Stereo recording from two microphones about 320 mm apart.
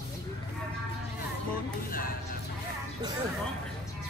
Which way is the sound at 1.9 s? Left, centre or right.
Left.